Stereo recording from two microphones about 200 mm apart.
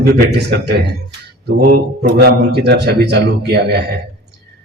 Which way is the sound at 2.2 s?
55° right (ahead or behind).